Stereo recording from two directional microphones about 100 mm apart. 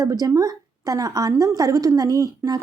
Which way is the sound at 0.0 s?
35° right (ahead or behind).